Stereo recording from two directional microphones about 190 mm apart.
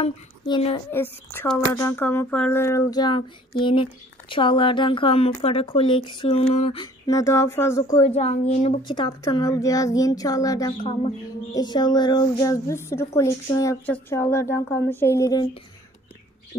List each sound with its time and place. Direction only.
0.0 s speech: 30° left (ahead or behind)
0.9 s speech: 10° left (ahead or behind)
8.1 s speech: 35° left (ahead or behind); by 10.9 s 20° left (ahead or behind)
10.9 s speech: 30° left (ahead or behind)